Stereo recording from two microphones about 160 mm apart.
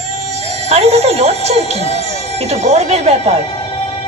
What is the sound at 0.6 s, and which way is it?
Speech, 40° right (ahead or behind).